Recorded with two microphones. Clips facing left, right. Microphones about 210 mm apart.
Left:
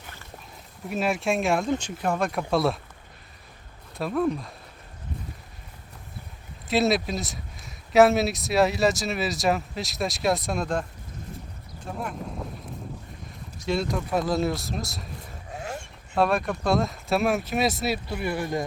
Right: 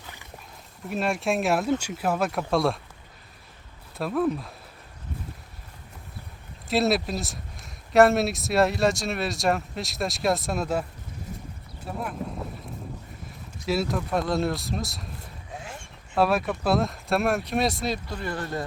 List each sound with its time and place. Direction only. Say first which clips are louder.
0.9 s speech: left 1 dB; centre (ahead or behind)
3.9 s speech: even; centre (ahead or behind)
6.7 s speech: left 1 dB; centre (ahead or behind)
11.9 s a sound: right 1 dB; 5° right (ahead or behind)
13.7 s speech: even; 5° right (ahead or behind)
16.1 s speech: even; centre (ahead or behind)